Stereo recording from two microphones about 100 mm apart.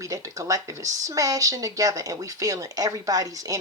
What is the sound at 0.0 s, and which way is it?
Speech, 30° right (ahead or behind).